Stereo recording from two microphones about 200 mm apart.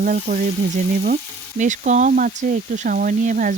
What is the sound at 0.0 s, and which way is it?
Frying, 40° right (ahead or behind).